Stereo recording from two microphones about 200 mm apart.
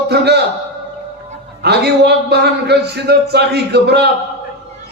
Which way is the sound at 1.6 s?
55° right (ahead or behind).